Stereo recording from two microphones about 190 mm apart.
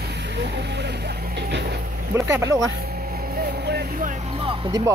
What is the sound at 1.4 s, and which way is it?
Vehicle, 65° right (ahead or behind).